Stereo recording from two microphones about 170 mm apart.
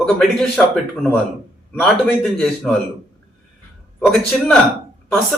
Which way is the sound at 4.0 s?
5° left (ahead or behind).